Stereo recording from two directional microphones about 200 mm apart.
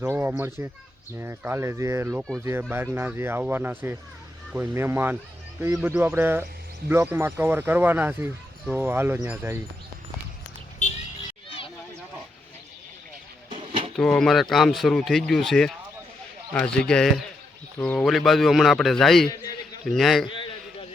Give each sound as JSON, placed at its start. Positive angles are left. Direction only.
{"t": 0.0, "sound": "speech", "side_deg": -10}
{"t": 10.8, "sound": "music", "side_deg": 40}
{"t": 13.9, "sound": "speech", "side_deg": 5}
{"t": 19.3, "sound": "a sound", "side_deg": 20}
{"t": 19.8, "sound": "speech", "side_deg": 0}
{"t": 20.2, "sound": "a sound", "side_deg": 25}